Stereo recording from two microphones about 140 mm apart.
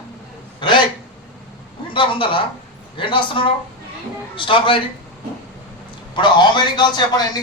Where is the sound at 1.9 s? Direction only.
35° left (ahead or behind).